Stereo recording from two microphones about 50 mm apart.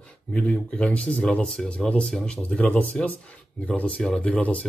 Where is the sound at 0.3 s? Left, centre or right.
Centre.